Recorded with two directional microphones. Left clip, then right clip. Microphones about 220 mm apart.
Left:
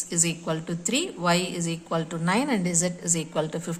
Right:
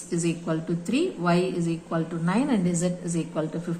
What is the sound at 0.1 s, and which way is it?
A woman's voice, 40° left (ahead or behind).